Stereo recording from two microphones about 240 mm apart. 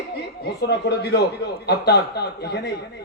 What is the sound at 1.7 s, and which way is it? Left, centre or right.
Speech, left.